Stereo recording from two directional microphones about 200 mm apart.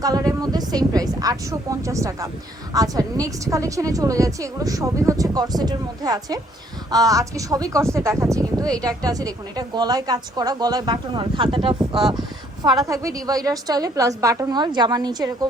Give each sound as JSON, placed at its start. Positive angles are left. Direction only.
{"t": 0.0, "sound": "speech", "side_deg": -15}